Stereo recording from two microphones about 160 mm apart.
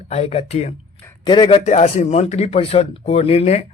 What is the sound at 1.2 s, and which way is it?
Speech, 30° left (ahead or behind).